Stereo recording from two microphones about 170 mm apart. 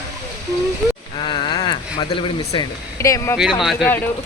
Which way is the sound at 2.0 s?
30° left (ahead or behind).